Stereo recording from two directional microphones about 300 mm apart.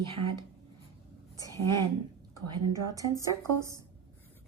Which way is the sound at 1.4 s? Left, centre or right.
Centre.